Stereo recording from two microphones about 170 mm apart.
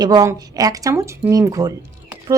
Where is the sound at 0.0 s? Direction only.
25° right (ahead or behind).